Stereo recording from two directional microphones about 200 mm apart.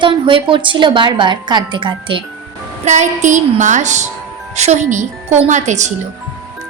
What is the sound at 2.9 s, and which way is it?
A woman's voice, 35° right (ahead or behind).